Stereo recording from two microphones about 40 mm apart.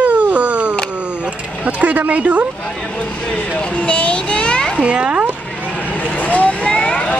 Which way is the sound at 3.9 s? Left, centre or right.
Left.